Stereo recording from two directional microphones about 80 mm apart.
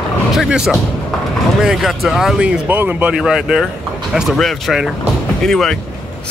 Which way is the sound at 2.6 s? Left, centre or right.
Right.